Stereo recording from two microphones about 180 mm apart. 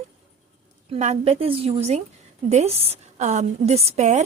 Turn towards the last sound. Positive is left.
turn(degrees=-40)  # may be behind; listen again after turning